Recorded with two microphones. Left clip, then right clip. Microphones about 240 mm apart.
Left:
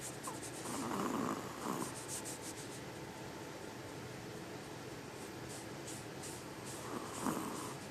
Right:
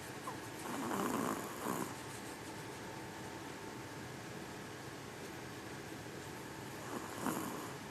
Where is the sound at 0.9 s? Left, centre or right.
Right.